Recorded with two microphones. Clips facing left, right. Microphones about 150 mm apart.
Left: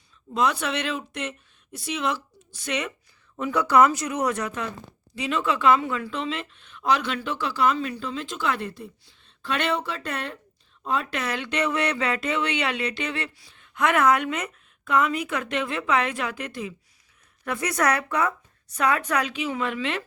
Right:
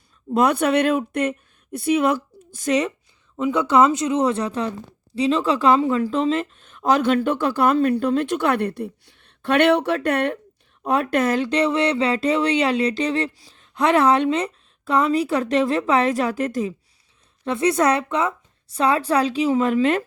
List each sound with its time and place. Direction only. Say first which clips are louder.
0.3 s speech: right 7 dB; 55° right (ahead or behind)
3.3 s a woman's voice: right 2 dB; 20° right (ahead or behind); by 16.7 s 40° right (ahead or behind)
17.4 s a woman's voice: right 6 dB; 25° right (ahead or behind); by 20.0 s 40° right (ahead or behind)